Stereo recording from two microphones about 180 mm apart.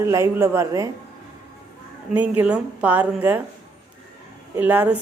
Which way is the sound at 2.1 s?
10° right (ahead or behind).